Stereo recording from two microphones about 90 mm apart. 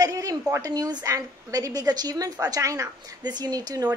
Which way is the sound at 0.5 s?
40° right (ahead or behind).